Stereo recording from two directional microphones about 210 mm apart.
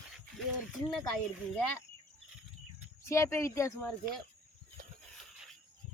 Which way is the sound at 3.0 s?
15° left (ahead or behind).